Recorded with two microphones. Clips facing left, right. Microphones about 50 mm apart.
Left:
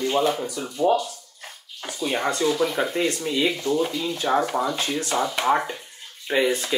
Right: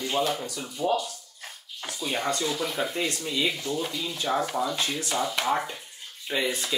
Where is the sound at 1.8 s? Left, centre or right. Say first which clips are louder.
Left 5 dB; centre.